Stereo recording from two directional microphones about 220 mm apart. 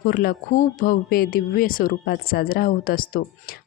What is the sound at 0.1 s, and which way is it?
Speech, 45° left (ahead or behind).